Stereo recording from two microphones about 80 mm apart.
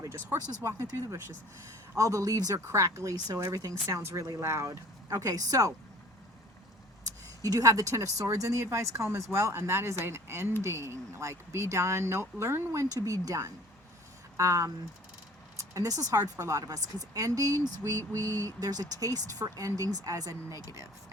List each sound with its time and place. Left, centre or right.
0.3 s speech: right
3.2 s speech: right
3.8 s speech: right
5.1 s speech: right
7.4 s speech: right